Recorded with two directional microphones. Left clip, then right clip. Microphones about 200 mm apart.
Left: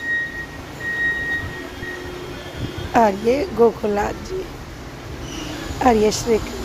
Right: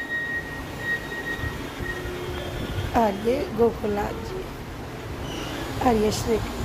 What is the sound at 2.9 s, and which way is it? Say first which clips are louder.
A woman's voice: left 6 dB; 35° left (ahead or behind).